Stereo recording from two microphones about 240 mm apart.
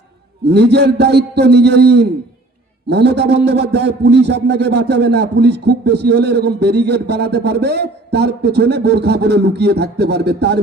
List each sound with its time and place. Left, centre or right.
0.4 s a man's voice: right